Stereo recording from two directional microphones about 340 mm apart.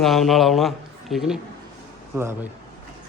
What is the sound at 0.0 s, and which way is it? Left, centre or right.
A man's voice, centre.